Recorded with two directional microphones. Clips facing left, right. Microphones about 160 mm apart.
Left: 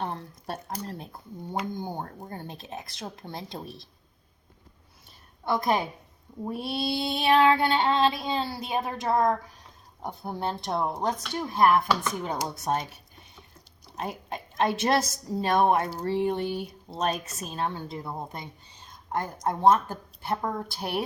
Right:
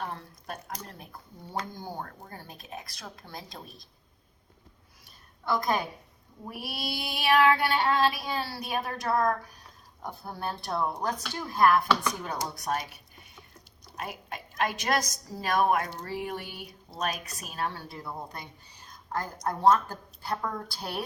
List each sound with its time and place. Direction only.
0.0 s speech: 30° left (ahead or behind)
1.7 s a sound: 20° left (ahead or behind)
2.2 s speech: 25° left (ahead or behind)
5.5 s speech: 25° left (ahead or behind)
13.9 s a woman's voice: 30° left (ahead or behind)